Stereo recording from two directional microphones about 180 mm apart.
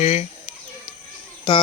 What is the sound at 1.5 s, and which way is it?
Speech, 25° left (ahead or behind).